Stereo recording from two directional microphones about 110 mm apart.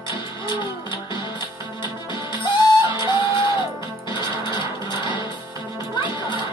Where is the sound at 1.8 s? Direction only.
45° left (ahead or behind).